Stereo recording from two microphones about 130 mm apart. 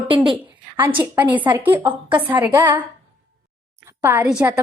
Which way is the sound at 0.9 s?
15° right (ahead or behind).